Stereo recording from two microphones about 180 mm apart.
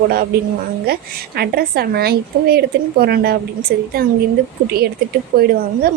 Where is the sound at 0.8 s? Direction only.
60° right (ahead or behind).